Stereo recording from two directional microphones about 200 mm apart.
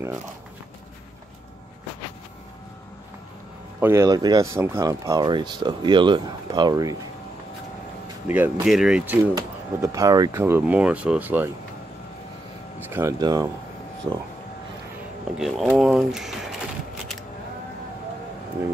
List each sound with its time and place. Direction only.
3.8 s speech: 15° right (ahead or behind)
8.3 s speech: 5° right (ahead or behind)
12.8 s speech: 15° right (ahead or behind)
15.3 s speech: centre (ahead or behind)